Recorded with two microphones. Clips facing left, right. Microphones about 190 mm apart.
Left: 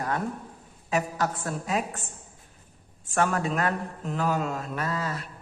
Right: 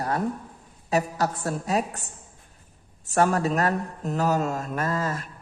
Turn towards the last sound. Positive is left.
turn(degrees=-45)  # may be behind; listen again after turning